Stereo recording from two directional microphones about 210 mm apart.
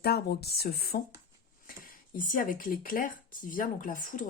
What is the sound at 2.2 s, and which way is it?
Speech, 40° left (ahead or behind).